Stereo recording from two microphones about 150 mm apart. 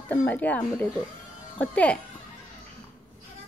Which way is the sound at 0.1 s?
10° left (ahead or behind).